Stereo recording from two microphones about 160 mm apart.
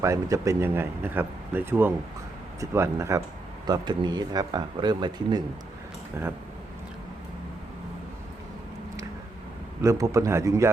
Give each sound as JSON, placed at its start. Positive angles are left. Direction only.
{"t": 0.0, "sound": "speech", "side_deg": -20}
{"t": 9.8, "sound": "speech", "side_deg": -20}